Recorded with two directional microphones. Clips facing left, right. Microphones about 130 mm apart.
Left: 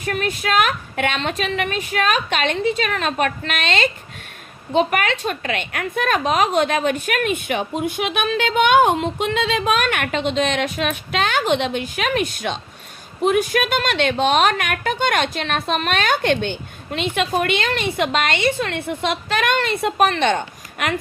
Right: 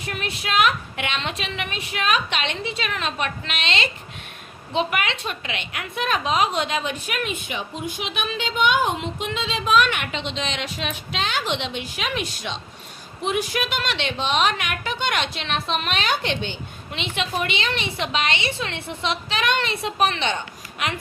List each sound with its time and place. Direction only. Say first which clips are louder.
0.0 s a woman's voice: left 7 dB; 45° left (ahead or behind)